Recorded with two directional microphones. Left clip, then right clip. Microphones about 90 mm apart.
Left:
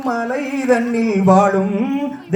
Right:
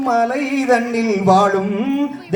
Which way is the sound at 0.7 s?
45° right (ahead or behind).